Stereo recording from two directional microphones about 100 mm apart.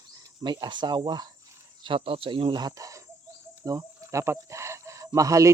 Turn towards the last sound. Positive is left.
turn(degrees=-35)  # may be behind; listen again after turning